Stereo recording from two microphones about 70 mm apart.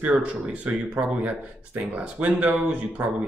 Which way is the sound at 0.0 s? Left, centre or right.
Centre.